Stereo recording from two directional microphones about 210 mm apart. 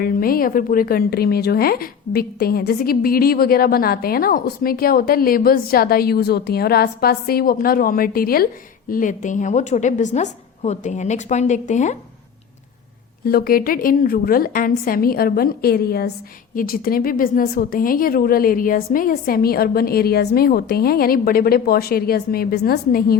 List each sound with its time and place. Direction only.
0.0 s a woman's voice: 45° left (ahead or behind)
13.2 s a woman's voice: 45° left (ahead or behind)